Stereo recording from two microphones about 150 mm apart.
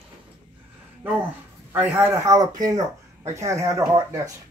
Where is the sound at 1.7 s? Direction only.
15° right (ahead or behind).